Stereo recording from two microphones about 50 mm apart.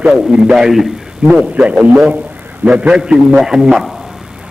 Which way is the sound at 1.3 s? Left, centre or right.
Centre.